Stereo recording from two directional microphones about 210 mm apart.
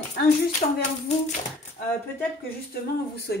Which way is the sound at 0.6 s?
25° left (ahead or behind).